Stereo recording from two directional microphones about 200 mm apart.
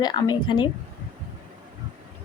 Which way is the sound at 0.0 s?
20° left (ahead or behind).